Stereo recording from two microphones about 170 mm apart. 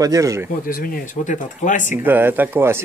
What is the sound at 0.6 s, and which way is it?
Speech, 55° left (ahead or behind).